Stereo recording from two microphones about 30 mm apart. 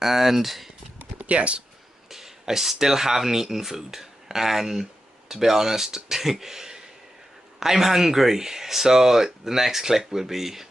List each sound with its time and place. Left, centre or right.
0.0 s speech: centre
1.1 s a sound: right
2.0 s speech: centre